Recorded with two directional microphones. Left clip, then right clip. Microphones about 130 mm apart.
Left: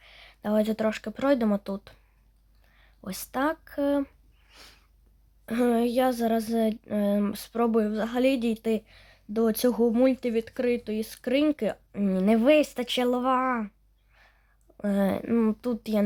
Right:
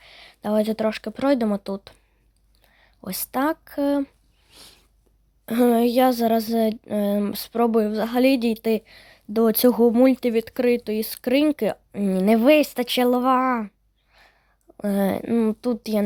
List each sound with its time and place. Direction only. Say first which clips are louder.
0.0 s speech: right 4 dB; 35° right (ahead or behind)
4.4 s a sound: right 3 dB; 20° right (ahead or behind)
5.5 s speech: right 6 dB; 40° right (ahead or behind)